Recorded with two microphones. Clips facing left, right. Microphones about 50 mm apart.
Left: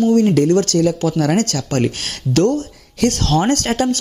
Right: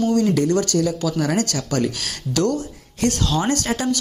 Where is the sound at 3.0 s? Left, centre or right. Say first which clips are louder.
Left 4 dB; left.